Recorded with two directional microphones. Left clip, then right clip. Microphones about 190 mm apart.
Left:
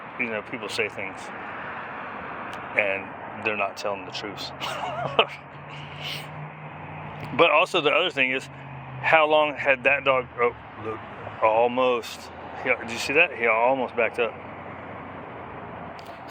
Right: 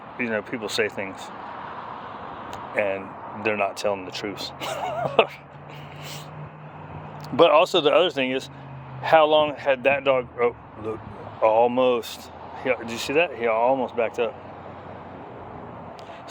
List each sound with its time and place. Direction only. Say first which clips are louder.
0.2 s speech: right 2 dB; 50° right (ahead or behind)
2.5 s a sound: even; 40° right (ahead or behind)
3.4 s speech: right 3 dB; 50° right (ahead or behind)
7.3 s speech: right 3 dB; 35° right (ahead or behind)